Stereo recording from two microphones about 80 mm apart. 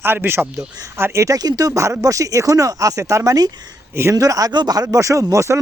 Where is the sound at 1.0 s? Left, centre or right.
Right.